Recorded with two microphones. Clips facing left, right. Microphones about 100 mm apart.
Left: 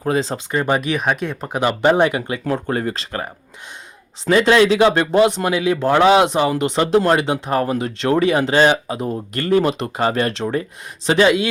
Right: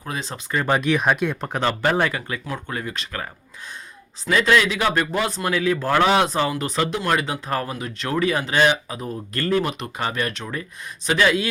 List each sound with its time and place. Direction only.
0.0 s speech: 30° left (ahead or behind)
0.6 s speech: 5° left (ahead or behind)
1.8 s speech: 20° left (ahead or behind)
2.5 s speech: 40° left (ahead or behind)
4.3 s speech: 30° left (ahead or behind)
8.9 s speech: 25° left (ahead or behind)
9.6 s speech: 35° left (ahead or behind)